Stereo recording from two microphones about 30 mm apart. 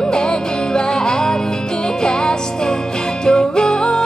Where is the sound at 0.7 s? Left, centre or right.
Left.